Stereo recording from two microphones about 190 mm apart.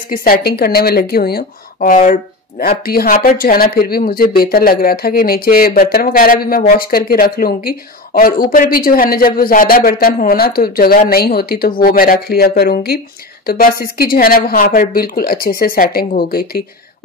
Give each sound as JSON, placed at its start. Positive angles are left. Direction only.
{"t": 0.1, "sound": "speech", "side_deg": 50}